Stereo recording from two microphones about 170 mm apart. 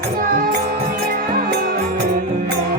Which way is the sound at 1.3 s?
60° right (ahead or behind).